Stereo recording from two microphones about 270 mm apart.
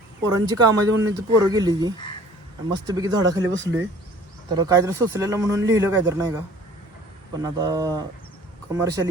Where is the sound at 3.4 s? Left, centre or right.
Right.